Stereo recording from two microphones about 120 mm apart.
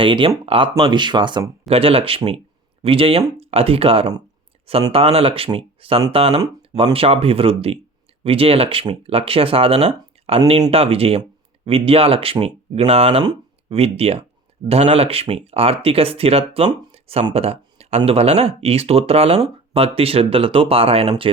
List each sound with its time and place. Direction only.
0.0 s speech: 45° right (ahead or behind)
1.6 s speech: 55° right (ahead or behind)